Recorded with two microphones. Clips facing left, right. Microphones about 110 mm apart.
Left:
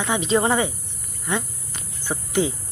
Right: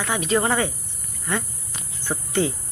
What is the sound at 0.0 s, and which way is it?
Speech, 20° left (ahead or behind).